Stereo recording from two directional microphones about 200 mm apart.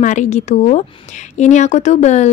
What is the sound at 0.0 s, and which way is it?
Speech, 40° left (ahead or behind).